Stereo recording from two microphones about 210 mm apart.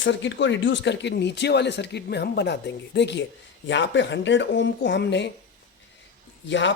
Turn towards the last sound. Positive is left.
turn(degrees=60)  # may be behind; listen again after turning